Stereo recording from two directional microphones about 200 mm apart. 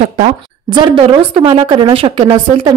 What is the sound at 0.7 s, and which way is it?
A woman's voice, 25° right (ahead or behind).